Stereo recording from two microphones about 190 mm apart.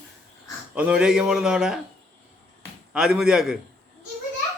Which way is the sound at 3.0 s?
5° right (ahead or behind).